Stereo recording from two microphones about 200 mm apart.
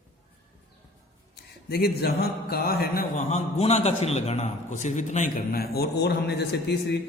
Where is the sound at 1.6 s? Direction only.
50° left (ahead or behind).